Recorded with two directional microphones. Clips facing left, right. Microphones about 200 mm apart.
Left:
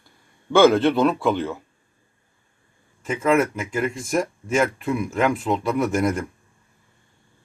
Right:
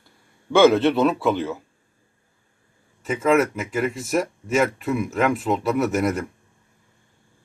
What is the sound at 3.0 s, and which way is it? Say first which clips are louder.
Speech: right 1 dB; centre (ahead or behind).